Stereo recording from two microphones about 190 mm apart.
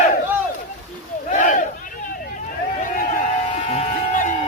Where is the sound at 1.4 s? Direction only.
45° left (ahead or behind).